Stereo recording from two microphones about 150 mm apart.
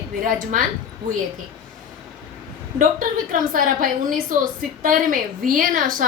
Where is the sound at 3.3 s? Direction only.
65° right (ahead or behind).